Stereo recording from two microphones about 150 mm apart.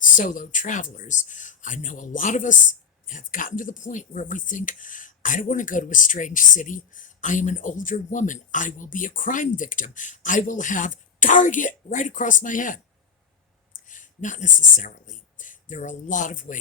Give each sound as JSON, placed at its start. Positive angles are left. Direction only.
{"t": 0.0, "sound": "speech", "side_deg": 60}